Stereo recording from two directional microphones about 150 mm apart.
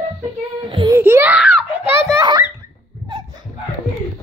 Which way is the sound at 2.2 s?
30° right (ahead or behind).